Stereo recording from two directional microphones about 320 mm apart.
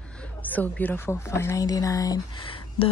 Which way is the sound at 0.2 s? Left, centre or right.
Centre.